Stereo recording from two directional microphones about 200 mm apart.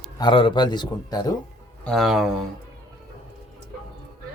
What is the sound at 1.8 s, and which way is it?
Speech, centre (ahead or behind).